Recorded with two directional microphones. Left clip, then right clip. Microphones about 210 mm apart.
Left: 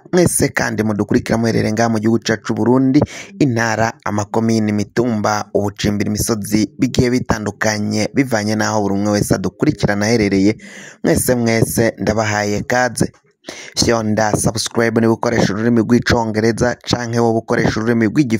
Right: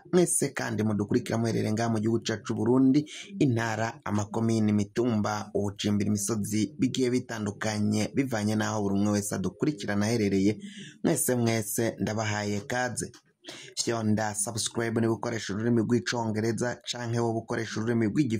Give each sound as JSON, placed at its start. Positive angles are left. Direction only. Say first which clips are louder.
{"t": 0.1, "sound": "speech", "louder": "left 11 dB", "side_deg": 45}